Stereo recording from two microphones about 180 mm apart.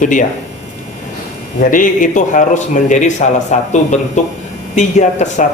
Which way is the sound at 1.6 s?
45° left (ahead or behind).